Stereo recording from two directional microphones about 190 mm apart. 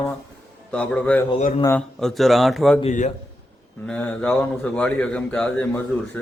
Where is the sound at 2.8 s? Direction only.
35° left (ahead or behind).